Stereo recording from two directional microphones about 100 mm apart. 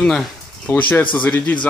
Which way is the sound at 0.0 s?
5° left (ahead or behind).